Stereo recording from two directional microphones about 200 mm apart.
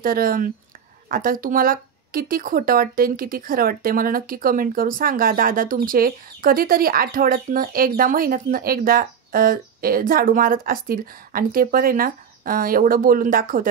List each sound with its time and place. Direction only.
0.0 s speech: 45° right (ahead or behind)